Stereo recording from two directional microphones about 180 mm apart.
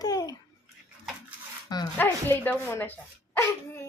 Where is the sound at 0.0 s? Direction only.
20° left (ahead or behind).